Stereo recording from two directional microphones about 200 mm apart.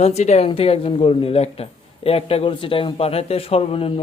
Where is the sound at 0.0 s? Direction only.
35° left (ahead or behind).